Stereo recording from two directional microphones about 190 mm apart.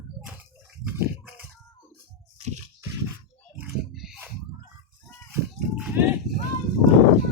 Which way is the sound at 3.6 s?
Centre (ahead or behind).